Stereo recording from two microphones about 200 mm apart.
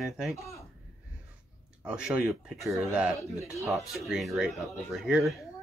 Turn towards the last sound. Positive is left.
turn(degrees=-5)  # may be behind; listen again after turning